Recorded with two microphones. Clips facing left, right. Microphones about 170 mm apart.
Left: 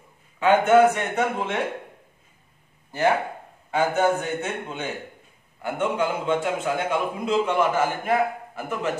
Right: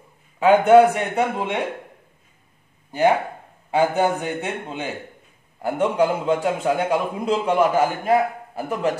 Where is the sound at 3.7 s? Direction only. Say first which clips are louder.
Right 2 dB; 15° right (ahead or behind).